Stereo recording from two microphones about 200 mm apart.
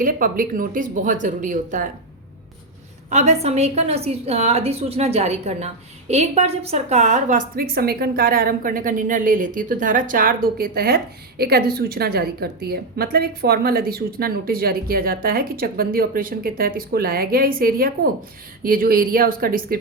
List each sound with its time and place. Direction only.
0.0 s speech: 45° right (ahead or behind)
3.1 s a woman's voice: 35° right (ahead or behind)